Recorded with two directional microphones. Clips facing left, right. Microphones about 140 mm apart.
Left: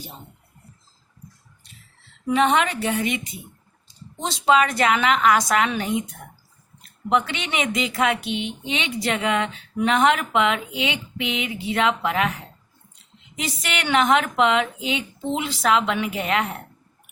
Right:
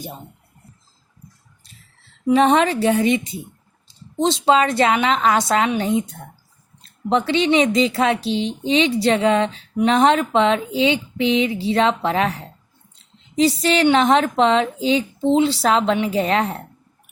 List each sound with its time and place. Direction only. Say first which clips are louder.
2.3 s a woman's voice: right 5 dB; 35° right (ahead or behind)